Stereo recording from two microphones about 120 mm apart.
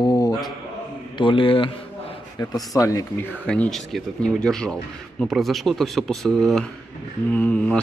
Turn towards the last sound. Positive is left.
turn(degrees=10)  # may be behind; listen again after turning